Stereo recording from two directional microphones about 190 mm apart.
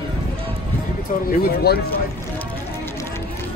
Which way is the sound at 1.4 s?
55° left (ahead or behind).